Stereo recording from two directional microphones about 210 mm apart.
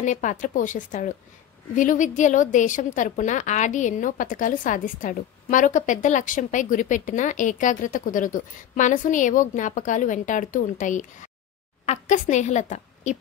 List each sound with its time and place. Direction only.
0.0 s a woman's voice: 35° left (ahead or behind)